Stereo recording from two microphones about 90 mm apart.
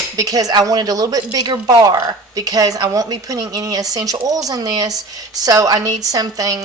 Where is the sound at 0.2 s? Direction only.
40° right (ahead or behind).